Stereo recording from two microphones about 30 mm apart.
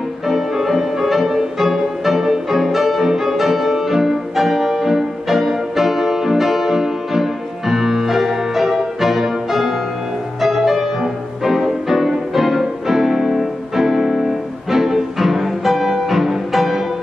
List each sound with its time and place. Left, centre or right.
0.3 s music: centre